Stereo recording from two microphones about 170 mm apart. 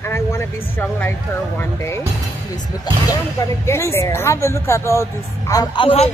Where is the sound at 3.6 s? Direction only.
15° left (ahead or behind).